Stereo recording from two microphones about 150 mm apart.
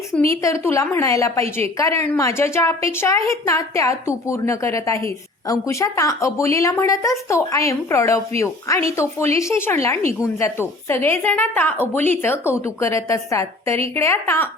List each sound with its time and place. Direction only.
0.1 s a woman's voice: 20° left (ahead or behind)